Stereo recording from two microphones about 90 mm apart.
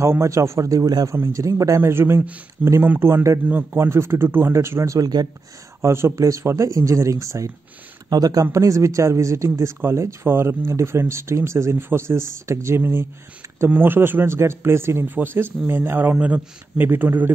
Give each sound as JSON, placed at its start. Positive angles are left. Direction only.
{"t": 0.0, "sound": "speech", "side_deg": -30}
{"t": 1.1, "sound": "speech", "side_deg": -35}
{"t": 1.8, "sound": "speech", "side_deg": -25}
{"t": 5.8, "sound": "speech", "side_deg": -30}